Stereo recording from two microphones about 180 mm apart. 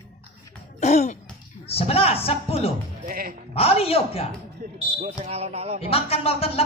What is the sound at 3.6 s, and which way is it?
Speech, 35° left (ahead or behind).